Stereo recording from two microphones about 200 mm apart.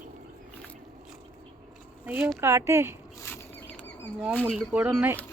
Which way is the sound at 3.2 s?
10° left (ahead or behind).